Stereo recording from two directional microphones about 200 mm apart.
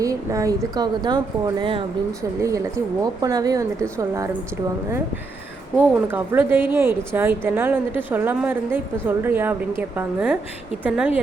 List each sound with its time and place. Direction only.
0.0 s a woman's voice: 15° right (ahead or behind)
5.7 s a woman's voice: 10° right (ahead or behind)